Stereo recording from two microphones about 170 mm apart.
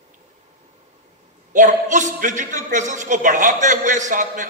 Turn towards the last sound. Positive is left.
turn(degrees=-50)  # may be behind; listen again after turning